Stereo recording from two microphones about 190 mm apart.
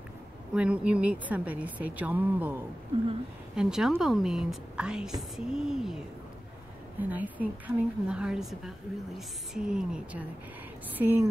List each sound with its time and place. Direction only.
0.6 s a woman's voice: 5° right (ahead or behind)
2.9 s speech: 25° right (ahead or behind)
3.5 s a woman's voice: 5° right (ahead or behind)
7.0 s a woman's voice: 10° right (ahead or behind)